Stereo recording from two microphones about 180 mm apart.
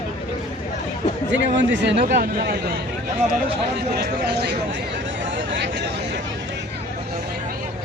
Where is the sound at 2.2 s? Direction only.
55° right (ahead or behind).